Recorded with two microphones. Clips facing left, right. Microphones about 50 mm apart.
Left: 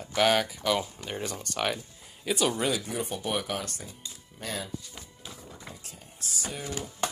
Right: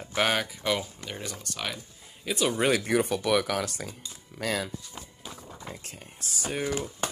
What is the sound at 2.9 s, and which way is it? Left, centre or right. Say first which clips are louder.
Speech: right 7 dB; right.